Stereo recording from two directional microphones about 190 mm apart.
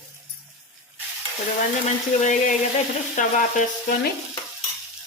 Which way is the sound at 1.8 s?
40° left (ahead or behind).